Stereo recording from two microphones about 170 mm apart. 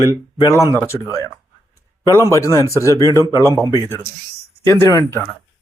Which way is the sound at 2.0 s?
15° left (ahead or behind).